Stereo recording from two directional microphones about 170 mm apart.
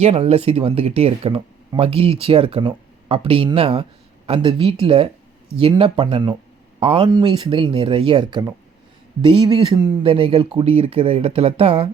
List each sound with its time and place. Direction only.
0.0 s speech: 35° right (ahead or behind)